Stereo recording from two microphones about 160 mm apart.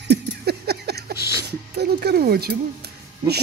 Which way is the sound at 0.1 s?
90° right.